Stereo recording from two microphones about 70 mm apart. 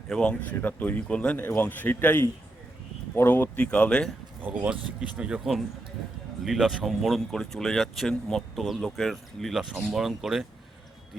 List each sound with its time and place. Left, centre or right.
0.1 s speech: centre
1.4 s speech: left
4.4 s speech: centre
6.4 s speech: centre